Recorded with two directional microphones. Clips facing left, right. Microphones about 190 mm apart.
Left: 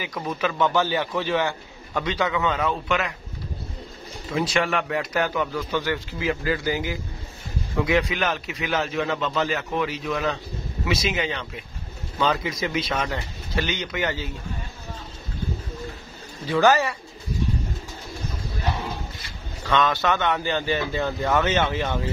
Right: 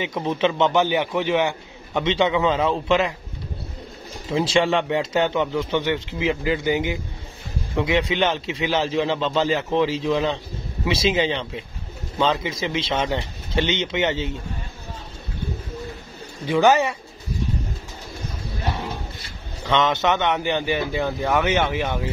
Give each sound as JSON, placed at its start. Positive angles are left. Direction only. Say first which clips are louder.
{"t": 0.0, "sound": "a man's voice", "louder": "right 5 dB", "side_deg": -25}
{"t": 4.3, "sound": "a man's voice", "louder": "right 4 dB", "side_deg": -30}
{"t": 16.4, "sound": "a man's voice", "louder": "right 2 dB", "side_deg": -20}
{"t": 19.6, "sound": "speech", "louder": "right 2 dB", "side_deg": -20}